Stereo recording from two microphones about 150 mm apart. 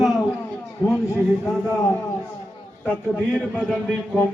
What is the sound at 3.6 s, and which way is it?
Speech, centre (ahead or behind).